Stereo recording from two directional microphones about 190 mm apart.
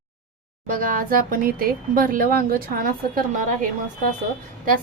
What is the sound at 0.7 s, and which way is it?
Speech, 45° right (ahead or behind).